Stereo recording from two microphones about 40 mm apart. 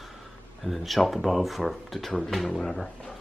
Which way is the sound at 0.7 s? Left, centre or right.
Centre.